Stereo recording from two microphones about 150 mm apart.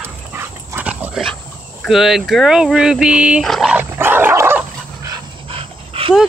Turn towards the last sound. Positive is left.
turn(degrees=-40)  # may be behind; listen again after turning